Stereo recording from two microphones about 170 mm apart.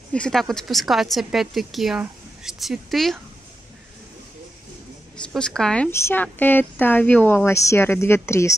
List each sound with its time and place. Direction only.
0.1 s a woman's voice: 5° left (ahead or behind)
5.2 s a woman's voice: 5° left (ahead or behind)
5.9 s speech: 15° left (ahead or behind)